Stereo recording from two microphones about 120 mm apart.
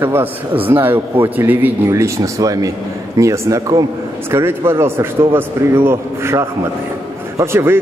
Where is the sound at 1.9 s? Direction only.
25° right (ahead or behind).